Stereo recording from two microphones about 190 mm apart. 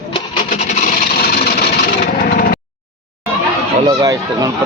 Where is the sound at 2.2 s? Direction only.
50° left (ahead or behind).